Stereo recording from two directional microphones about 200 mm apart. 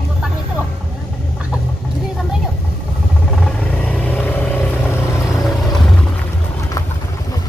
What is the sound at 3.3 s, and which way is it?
Vehicle, 5° left (ahead or behind).